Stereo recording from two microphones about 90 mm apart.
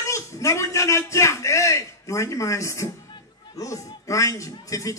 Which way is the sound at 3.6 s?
35° left (ahead or behind).